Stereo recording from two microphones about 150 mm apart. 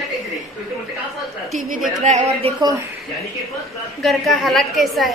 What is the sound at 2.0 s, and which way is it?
Speech, 45° right (ahead or behind).